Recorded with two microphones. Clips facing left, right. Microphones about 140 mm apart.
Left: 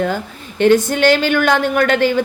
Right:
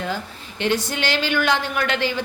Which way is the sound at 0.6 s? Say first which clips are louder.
Left 11 dB; 50° left (ahead or behind).